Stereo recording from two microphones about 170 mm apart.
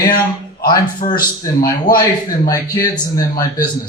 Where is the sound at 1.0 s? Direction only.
50° left (ahead or behind).